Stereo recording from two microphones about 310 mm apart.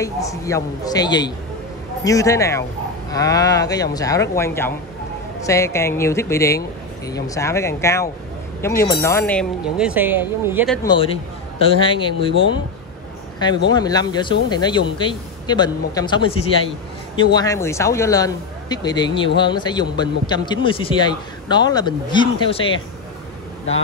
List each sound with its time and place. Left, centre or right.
0.0 s speech: centre
10.8 s speech: centre
13.7 s speech: centre